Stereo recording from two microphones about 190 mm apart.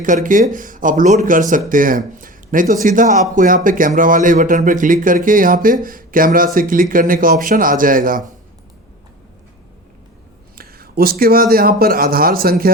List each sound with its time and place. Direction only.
0.0 s speech: 45° right (ahead or behind)
10.6 s speech: 55° right (ahead or behind)